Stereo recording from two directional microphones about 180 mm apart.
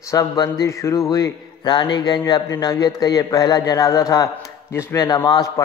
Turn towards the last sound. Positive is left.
turn(degrees=20)  # may be behind; listen again after turning